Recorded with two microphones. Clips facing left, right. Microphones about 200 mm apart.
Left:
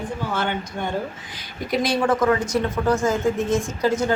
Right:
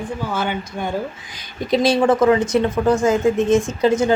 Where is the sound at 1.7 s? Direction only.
25° right (ahead or behind).